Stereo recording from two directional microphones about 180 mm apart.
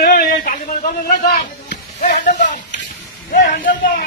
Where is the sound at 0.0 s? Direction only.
50° left (ahead or behind).